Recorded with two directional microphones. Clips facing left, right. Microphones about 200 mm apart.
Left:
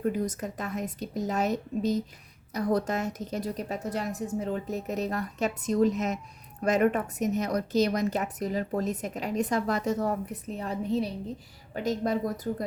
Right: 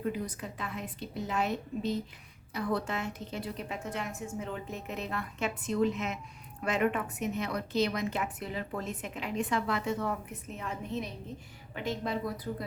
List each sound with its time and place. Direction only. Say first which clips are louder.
0.0 s a woman's voice: left 6 dB; 45° left (ahead or behind)